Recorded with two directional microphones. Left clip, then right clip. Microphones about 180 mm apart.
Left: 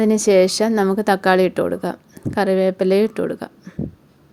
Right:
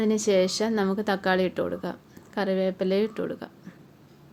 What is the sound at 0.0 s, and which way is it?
Speech, 40° left (ahead or behind).